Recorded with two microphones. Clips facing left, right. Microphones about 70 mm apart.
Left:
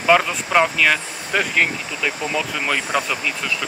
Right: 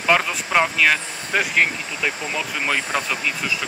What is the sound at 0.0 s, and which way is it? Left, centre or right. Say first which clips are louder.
Speech: left 3 dB; centre.